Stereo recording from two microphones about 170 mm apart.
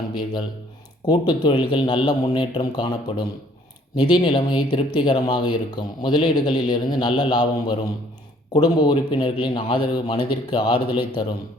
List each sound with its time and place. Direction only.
0.1 s speech: 25° left (ahead or behind)